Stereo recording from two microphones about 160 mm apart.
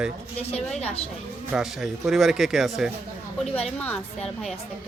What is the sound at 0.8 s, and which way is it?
Speech, 40° left (ahead or behind).